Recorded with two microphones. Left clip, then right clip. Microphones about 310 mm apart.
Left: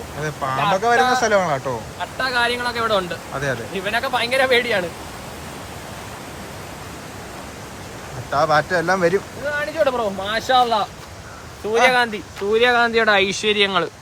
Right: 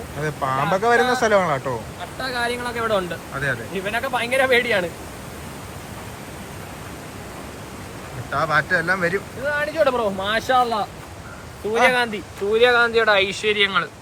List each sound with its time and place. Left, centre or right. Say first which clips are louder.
0.2 s speech: left 1 dB; centre
2.1 s speech: left 5 dB; centre
8.4 s speech: left 2 dB; centre
11.9 s speech: left 2 dB; left; by 13.8 s centre